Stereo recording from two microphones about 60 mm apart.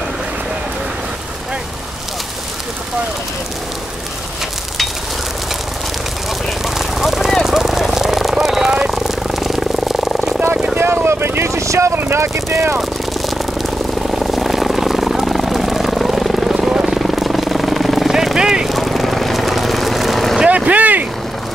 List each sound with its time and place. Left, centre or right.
6.6 s vehicle: centre
10.8 s vehicle: right
12.0 s vehicle: right
12.4 s vehicle: right
13.2 s vehicle: centre
18.8 s vehicle: centre
20.4 s vehicle: right